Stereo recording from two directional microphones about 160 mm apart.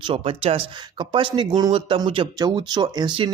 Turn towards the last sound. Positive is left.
turn(degrees=-25)  # may be behind; listen again after turning